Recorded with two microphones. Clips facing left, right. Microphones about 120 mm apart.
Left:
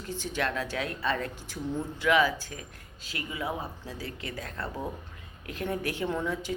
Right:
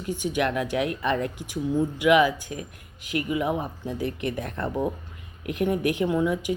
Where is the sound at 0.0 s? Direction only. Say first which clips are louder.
Right 6 dB; 15° right (ahead or behind).